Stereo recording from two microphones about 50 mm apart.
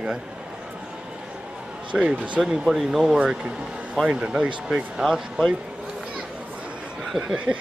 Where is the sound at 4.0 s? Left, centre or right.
Centre.